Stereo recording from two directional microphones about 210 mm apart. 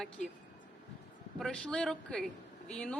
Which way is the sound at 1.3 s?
5° left (ahead or behind).